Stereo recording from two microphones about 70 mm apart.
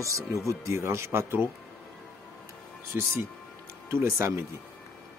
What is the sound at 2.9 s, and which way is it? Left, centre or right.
Speech, right.